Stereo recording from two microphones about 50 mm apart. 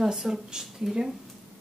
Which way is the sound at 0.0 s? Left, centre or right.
Centre.